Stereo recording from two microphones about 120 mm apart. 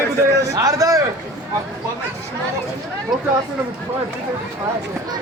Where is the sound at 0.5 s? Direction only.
30° right (ahead or behind).